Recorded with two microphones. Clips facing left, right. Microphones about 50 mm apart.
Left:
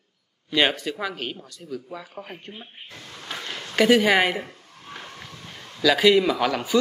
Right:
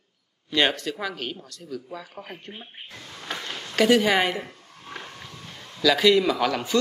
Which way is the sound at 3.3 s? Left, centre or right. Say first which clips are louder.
Left 2 dB; centre.